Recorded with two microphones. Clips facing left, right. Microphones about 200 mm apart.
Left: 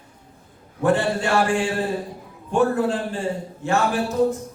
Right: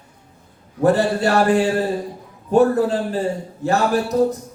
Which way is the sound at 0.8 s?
40° right (ahead or behind).